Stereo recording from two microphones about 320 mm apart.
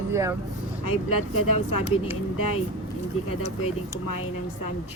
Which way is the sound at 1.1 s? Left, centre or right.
Left.